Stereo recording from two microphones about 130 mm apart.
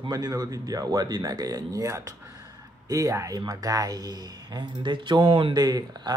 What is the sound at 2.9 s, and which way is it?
Speech, 25° right (ahead or behind).